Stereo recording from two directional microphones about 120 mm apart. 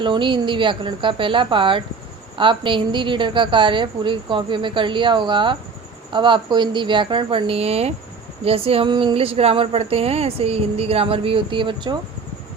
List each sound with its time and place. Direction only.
0.0 s speech: 45° right (ahead or behind)